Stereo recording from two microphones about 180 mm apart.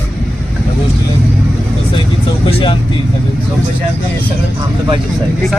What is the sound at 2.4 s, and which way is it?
Speech, 30° left (ahead or behind).